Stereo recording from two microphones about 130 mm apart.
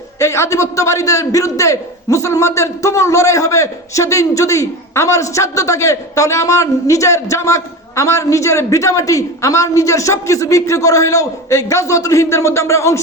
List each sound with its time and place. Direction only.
0.2 s a man's voice: 20° left (ahead or behind)